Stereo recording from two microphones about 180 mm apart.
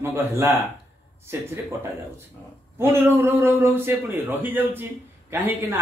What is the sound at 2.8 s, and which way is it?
Speech, 15° right (ahead or behind).